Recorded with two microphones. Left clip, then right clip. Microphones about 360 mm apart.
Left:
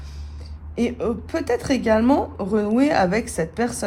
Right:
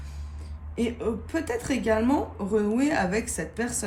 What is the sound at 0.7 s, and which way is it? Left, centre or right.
A woman's voice, left.